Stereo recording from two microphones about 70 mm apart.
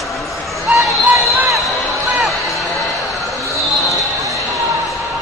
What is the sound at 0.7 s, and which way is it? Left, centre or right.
Basketball bounce, centre.